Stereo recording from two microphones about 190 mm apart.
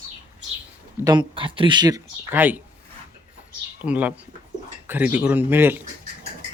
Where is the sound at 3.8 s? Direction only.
5° right (ahead or behind).